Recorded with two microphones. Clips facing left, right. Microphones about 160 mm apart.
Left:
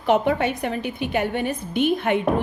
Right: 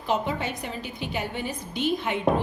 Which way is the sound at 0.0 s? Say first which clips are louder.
Left 7 dB; 65° left (ahead or behind).